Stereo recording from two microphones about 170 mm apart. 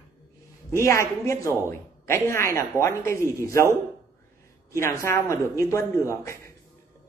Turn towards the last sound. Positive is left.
turn(degrees=15)  # may be behind; listen again after turning